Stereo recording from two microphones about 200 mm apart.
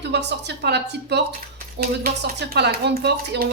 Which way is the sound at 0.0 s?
60° right (ahead or behind).